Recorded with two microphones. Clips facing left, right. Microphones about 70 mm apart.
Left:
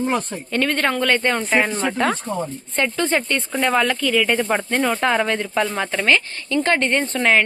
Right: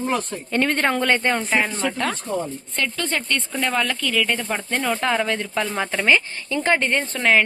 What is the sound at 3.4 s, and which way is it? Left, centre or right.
Speech, centre.